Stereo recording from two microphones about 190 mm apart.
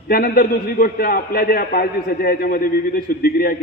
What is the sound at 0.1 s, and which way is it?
A man's voice, 55° left (ahead or behind).